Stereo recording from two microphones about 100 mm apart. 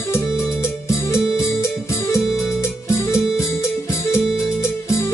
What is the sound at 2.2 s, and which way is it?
Music, 5° right (ahead or behind).